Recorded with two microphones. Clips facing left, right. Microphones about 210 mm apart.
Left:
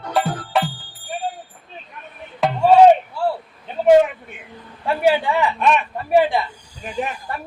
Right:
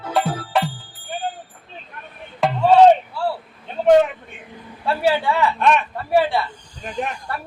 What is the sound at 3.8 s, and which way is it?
Vehicle, 10° left (ahead or behind).